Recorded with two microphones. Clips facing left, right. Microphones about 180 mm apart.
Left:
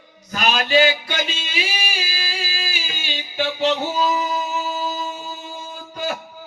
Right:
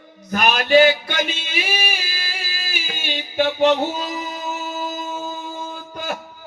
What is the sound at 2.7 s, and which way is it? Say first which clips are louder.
Music: right 2 dB; 55° right (ahead or behind).